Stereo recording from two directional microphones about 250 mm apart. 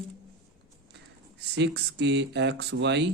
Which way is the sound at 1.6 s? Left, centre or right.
Right.